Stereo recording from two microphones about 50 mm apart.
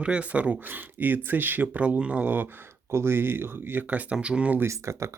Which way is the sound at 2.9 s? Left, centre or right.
Right.